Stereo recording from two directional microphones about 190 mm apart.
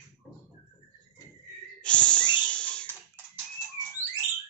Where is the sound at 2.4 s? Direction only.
5° left (ahead or behind).